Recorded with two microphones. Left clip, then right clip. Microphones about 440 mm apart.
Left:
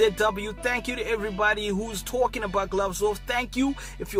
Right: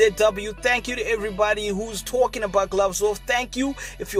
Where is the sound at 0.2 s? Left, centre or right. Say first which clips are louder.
Right 5 dB; right.